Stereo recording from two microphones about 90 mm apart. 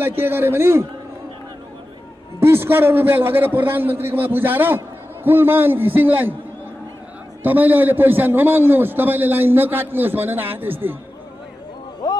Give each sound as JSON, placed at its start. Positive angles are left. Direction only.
{"t": 0.2, "sound": "a man's voice", "side_deg": -25}
{"t": 2.4, "sound": "a man's voice", "side_deg": -25}
{"t": 7.4, "sound": "a man's voice", "side_deg": -20}
{"t": 12.0, "sound": "a sound", "side_deg": 45}